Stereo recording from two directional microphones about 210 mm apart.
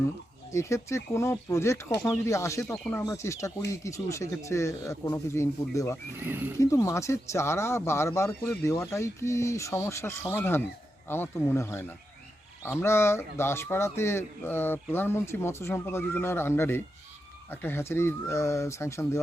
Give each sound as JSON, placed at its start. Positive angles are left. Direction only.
{"t": 0.5, "sound": "speech", "side_deg": 15}
{"t": 6.1, "sound": "speech", "side_deg": -10}
{"t": 6.6, "sound": "speech", "side_deg": 15}